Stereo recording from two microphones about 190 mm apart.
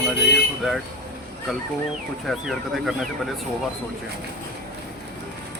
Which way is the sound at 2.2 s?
Centre (ahead or behind).